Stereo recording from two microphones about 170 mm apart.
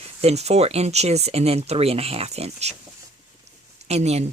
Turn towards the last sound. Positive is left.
turn(degrees=-40)  # may be behind; listen again after turning